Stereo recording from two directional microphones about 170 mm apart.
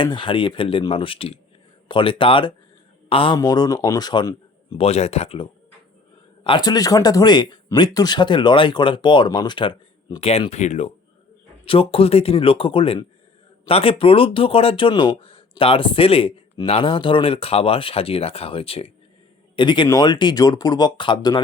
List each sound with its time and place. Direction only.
0.0 s speech: 30° left (ahead or behind)
4.9 s speech: 40° left (ahead or behind)